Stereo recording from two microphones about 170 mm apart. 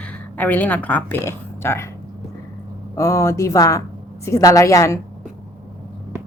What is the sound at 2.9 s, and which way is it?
A woman's voice, 15° left (ahead or behind).